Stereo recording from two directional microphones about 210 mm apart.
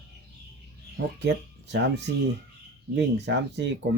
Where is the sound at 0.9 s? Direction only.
55° right (ahead or behind).